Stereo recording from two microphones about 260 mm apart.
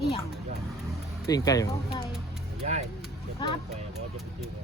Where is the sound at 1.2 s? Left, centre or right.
Centre.